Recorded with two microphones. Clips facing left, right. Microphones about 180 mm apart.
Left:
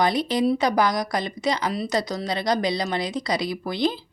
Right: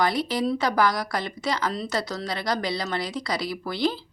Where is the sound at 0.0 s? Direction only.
20° left (ahead or behind).